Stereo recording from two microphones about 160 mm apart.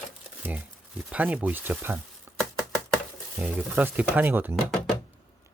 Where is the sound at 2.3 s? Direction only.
15° right (ahead or behind).